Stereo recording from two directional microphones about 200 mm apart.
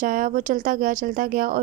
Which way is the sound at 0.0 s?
40° right (ahead or behind).